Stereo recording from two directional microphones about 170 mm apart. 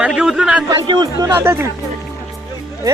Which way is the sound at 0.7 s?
25° right (ahead or behind).